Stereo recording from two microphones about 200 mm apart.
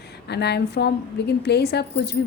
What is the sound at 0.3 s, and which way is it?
A woman's voice, 55° left (ahead or behind).